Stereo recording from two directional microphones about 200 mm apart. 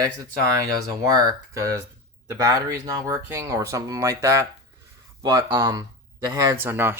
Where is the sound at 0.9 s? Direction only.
20° right (ahead or behind).